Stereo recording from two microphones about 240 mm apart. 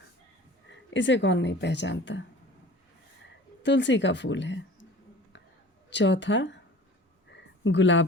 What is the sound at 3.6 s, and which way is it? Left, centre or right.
Speech, left.